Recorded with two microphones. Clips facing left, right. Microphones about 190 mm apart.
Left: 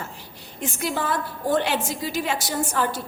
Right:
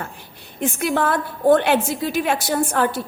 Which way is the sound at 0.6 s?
60° right (ahead or behind).